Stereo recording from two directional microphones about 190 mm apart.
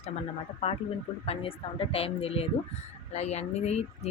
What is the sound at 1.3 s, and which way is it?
Speech, 30° left (ahead or behind).